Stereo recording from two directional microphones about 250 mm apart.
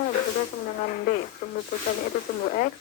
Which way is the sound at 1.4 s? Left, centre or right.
Left.